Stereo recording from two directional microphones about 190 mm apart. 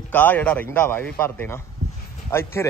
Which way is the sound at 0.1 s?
10° left (ahead or behind).